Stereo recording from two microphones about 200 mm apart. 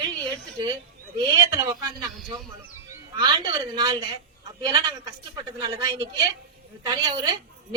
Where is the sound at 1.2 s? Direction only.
15° right (ahead or behind).